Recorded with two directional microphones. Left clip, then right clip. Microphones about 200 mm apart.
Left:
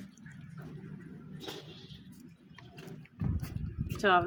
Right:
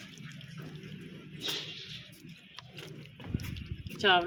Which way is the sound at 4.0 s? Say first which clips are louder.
Right 1 dB; 30° left (ahead or behind).